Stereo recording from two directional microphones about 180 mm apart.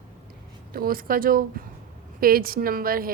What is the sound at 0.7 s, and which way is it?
A woman's voice, 55° right (ahead or behind).